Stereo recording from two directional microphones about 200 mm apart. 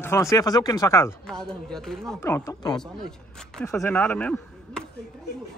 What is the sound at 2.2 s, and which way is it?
Speech, 15° left (ahead or behind).